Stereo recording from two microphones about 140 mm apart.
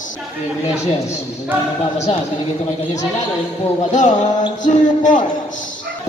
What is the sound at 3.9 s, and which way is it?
Speech, 60° left (ahead or behind).